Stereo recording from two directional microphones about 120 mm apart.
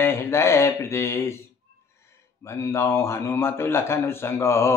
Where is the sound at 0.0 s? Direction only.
20° left (ahead or behind).